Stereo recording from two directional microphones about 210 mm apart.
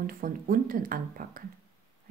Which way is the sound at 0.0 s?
40° right (ahead or behind).